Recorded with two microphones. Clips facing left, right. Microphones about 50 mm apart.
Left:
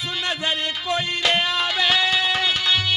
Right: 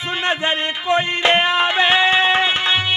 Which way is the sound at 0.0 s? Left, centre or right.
Right.